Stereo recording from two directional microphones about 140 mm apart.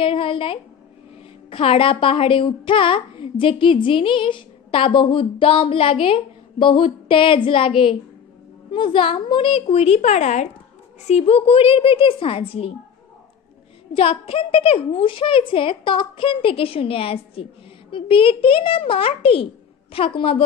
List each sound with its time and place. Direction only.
0.0 s a woman's voice: 40° left (ahead or behind)
13.9 s a woman's voice: 40° left (ahead or behind)